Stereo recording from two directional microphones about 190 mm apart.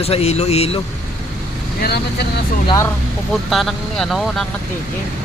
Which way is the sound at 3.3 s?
Centre (ahead or behind).